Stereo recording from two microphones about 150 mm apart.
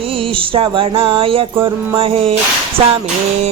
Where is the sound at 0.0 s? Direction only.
40° right (ahead or behind).